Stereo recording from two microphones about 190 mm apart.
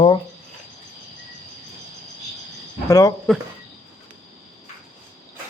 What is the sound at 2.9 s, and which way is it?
Speech, 15° left (ahead or behind).